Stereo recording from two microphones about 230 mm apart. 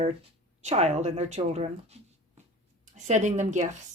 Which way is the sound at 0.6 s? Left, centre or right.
Right.